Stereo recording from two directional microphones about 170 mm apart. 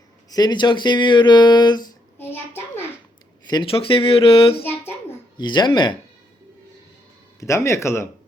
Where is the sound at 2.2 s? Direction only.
15° left (ahead or behind).